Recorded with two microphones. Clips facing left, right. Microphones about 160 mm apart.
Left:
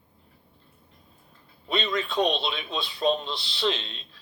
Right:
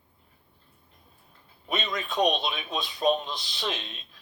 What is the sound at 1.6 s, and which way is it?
A man's voice, 15° right (ahead or behind).